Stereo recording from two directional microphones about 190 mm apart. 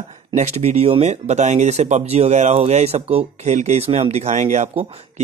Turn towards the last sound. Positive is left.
turn(degrees=-30)  # may be behind; listen again after turning